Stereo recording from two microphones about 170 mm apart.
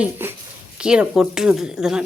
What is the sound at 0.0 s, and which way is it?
Speech, 10° right (ahead or behind).